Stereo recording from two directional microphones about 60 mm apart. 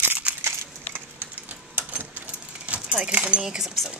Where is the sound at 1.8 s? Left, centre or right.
Right.